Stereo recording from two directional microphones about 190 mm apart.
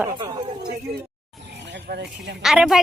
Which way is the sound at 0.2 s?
25° right (ahead or behind).